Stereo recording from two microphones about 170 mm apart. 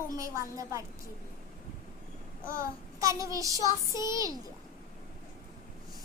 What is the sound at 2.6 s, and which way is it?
Child singing, 20° right (ahead or behind).